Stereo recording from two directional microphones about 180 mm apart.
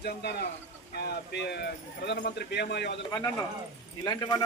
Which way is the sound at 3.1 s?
20° left (ahead or behind).